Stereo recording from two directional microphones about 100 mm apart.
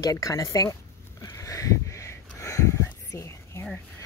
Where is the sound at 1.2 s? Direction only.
35° left (ahead or behind).